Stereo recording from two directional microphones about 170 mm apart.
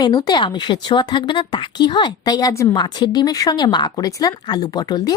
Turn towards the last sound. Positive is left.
turn(degrees=25)  # may be behind; listen again after turning